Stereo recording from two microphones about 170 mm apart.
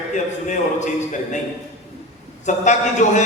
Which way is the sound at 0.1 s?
45° left (ahead or behind).